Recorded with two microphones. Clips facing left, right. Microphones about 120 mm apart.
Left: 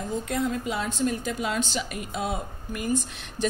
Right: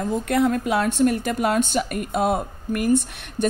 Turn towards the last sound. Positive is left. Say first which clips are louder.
# right 4 dB
turn(degrees=-60)  # may be behind; listen again after turning